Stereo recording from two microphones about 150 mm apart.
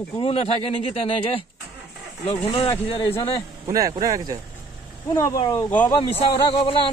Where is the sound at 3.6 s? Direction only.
25° right (ahead or behind).